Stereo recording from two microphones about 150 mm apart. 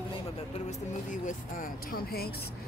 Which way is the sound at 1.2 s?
65° left (ahead or behind).